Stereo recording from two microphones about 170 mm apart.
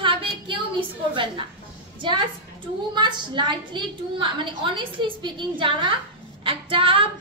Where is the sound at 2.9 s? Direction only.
25° right (ahead or behind).